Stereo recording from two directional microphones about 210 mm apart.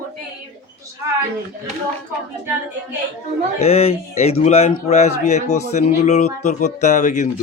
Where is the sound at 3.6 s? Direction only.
30° left (ahead or behind).